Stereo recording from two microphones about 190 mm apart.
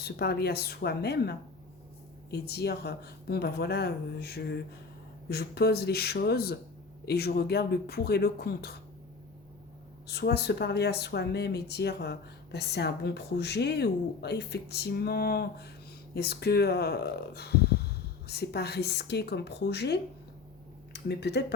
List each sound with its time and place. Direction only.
0.0 s speech: 55° left (ahead or behind)
10.1 s speech: 60° left (ahead or behind)